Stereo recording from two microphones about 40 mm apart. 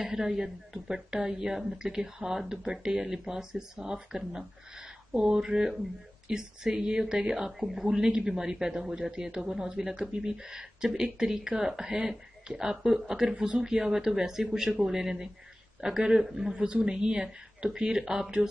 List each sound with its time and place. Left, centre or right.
0.0 s speech: centre
5.5 s a man's voice: centre
13.3 s a man's voice: right